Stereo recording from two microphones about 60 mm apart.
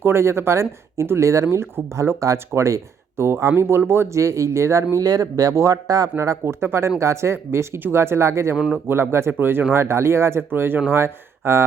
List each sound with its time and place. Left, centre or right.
0.0 s speech: right
4.9 s speech: right
6.1 s speech: right